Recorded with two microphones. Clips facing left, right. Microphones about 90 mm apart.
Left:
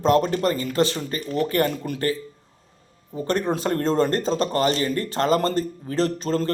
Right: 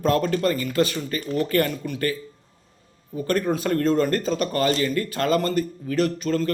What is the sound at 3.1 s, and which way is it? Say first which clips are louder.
A man's voice: even; 25° left (ahead or behind).